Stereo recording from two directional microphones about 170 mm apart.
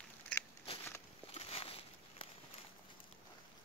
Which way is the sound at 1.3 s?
35° left (ahead or behind).